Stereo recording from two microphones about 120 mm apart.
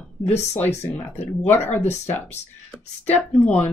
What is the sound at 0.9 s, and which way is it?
Speech, 65° left (ahead or behind).